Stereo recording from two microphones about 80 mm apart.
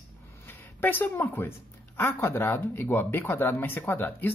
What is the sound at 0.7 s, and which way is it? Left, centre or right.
Speech, left.